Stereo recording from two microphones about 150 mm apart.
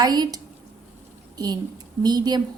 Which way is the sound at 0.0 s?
25° right (ahead or behind).